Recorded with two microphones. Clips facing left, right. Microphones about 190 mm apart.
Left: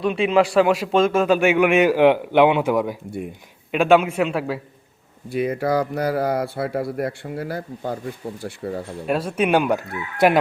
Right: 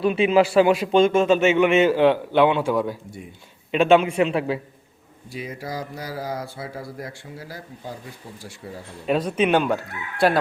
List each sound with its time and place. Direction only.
0.0 s a man's voice: 5° right (ahead or behind)
5.3 s speech: 60° left (ahead or behind)
9.0 s a man's voice: 5° left (ahead or behind)